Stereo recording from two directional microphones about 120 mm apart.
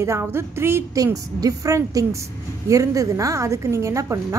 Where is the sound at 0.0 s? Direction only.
20° right (ahead or behind).